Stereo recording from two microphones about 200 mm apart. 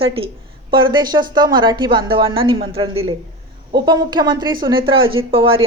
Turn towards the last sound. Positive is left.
turn(degrees=-25)  # may be behind; listen again after turning